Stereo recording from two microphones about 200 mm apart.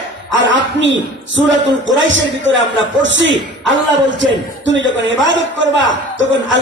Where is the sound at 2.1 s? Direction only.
65° right (ahead or behind).